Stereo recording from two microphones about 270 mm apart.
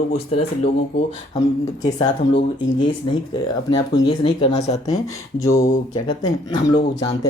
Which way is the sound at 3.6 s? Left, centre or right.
Centre.